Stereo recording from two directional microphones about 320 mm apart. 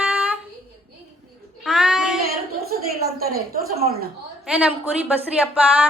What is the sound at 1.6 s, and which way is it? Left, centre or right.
Speech, centre.